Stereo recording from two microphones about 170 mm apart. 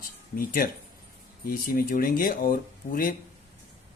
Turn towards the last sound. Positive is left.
turn(degrees=55)  # may be behind; listen again after turning